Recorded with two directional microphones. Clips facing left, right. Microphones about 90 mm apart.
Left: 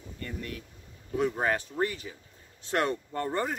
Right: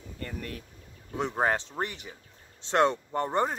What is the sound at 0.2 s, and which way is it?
Speech, 40° right (ahead or behind).